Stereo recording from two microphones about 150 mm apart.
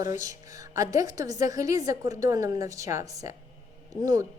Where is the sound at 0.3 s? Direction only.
25° right (ahead or behind).